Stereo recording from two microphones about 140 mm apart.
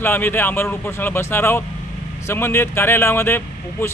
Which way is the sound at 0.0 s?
15° left (ahead or behind).